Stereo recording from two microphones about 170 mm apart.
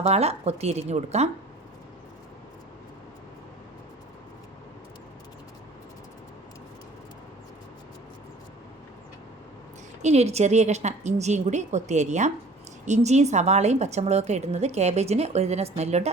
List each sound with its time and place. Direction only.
0.0 s a woman's voice: 40° right (ahead or behind)
10.0 s a woman's voice: 40° right (ahead or behind)